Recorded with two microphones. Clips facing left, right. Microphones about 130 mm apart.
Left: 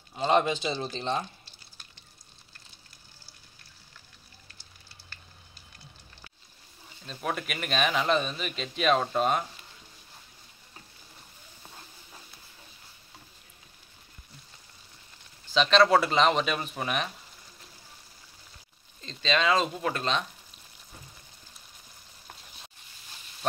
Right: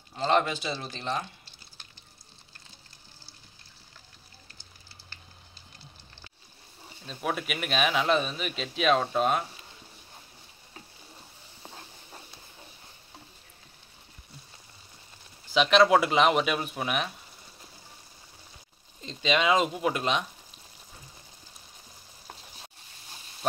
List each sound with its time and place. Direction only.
0.2 s speech: 20° left (ahead or behind)
7.1 s a man's voice: centre (ahead or behind)
11.6 s a sound: 25° right (ahead or behind)
15.5 s speech: 10° right (ahead or behind)
18.9 s speech: 15° right (ahead or behind)